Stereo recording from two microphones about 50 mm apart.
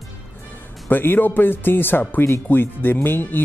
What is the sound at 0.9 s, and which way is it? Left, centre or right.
Speech, left.